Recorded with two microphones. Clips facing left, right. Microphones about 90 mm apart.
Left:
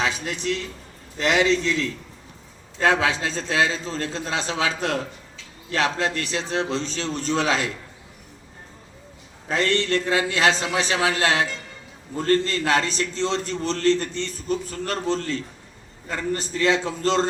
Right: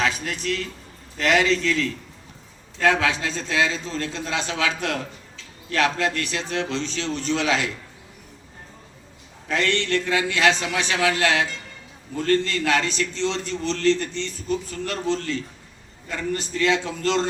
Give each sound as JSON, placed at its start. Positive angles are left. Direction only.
{"t": 0.0, "sound": "a man's voice", "side_deg": 25}
{"t": 9.5, "sound": "a man's voice", "side_deg": 35}